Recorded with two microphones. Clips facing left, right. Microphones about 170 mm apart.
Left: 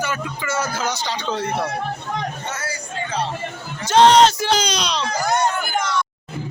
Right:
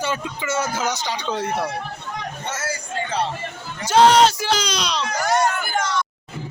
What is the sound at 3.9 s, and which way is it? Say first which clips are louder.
Speech: left 1 dB; 5° right (ahead or behind).